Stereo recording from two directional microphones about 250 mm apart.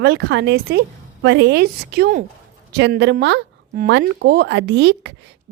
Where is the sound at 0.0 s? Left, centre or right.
Right.